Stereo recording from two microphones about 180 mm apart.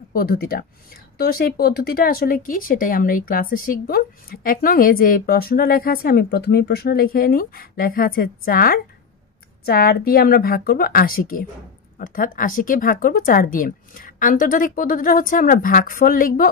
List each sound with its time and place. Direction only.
0.1 s speech: 55° left (ahead or behind)